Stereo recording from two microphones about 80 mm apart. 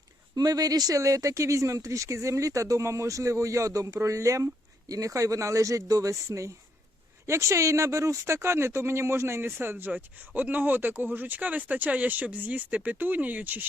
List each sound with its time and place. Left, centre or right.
0.3 s speech: right